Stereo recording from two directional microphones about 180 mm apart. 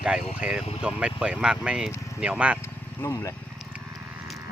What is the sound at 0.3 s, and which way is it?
Speech, 5° right (ahead or behind).